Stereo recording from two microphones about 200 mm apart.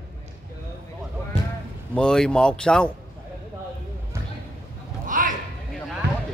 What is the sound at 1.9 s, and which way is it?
Speech, 5° left (ahead or behind).